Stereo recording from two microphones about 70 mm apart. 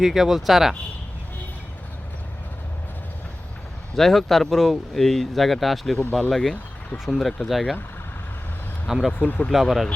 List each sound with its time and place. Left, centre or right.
0.0 s speech: centre
3.9 s speech: centre
8.9 s speech: centre
9.1 s speech: left
9.5 s speech: centre